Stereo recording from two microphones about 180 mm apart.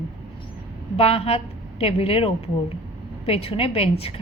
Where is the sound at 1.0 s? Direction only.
35° left (ahead or behind).